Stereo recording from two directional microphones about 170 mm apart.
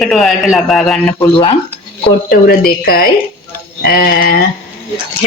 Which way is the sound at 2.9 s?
60° left (ahead or behind).